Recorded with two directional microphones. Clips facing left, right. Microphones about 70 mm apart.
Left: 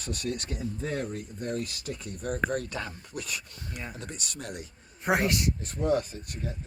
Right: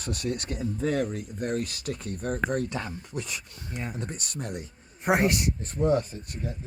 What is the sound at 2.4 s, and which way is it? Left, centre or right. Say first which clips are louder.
Speech: right 3 dB; right.